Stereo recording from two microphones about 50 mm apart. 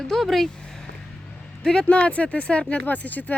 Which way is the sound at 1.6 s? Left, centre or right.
Centre.